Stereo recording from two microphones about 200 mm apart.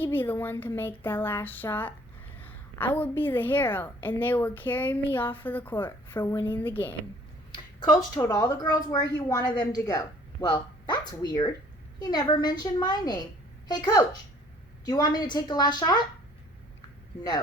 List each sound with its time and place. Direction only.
0.0 s a woman's voice: 10° left (ahead or behind)
7.5 s a sound: 20° left (ahead or behind)
8.2 s a woman's voice: 20° left (ahead or behind)